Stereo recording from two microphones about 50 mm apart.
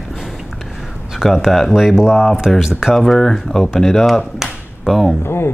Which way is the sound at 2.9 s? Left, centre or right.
Centre.